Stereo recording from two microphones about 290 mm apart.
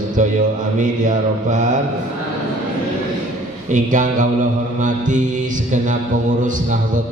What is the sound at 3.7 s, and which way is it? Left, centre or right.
Mantra, right.